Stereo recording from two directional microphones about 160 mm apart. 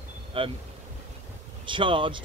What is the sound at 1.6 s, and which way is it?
Speech, 30° right (ahead or behind).